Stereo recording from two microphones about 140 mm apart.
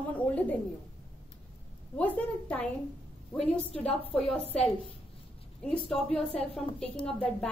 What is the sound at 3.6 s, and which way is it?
Speech, 40° left (ahead or behind).